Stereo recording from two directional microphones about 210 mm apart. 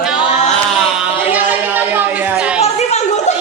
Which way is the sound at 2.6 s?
30° left (ahead or behind).